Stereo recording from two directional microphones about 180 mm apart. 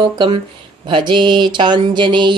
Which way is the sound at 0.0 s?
25° right (ahead or behind).